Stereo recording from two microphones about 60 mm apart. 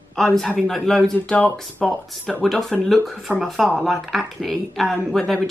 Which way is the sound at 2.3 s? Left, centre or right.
Centre.